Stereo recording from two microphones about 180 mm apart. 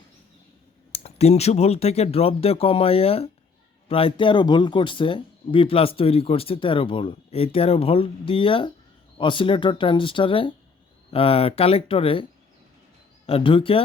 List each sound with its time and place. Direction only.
0.9 s speech: 35° left (ahead or behind)
13.2 s speech: 30° left (ahead or behind)